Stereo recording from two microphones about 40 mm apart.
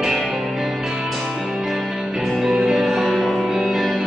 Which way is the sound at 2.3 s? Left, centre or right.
Right.